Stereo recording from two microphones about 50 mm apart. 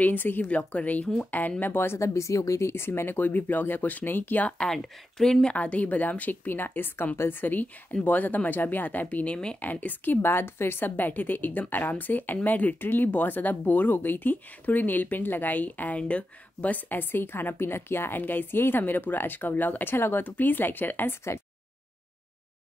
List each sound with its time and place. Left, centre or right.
0.0 s a woman's voice: left
0.5 s speech: left
1.6 s a woman's voice: left
2.0 s speech: left
2.7 s a woman's voice: left
4.7 s speech: centre
5.5 s speech: left
9.1 s speech: left
9.6 s speech: left
10.2 s a woman's voice: left
20.2 s speech: left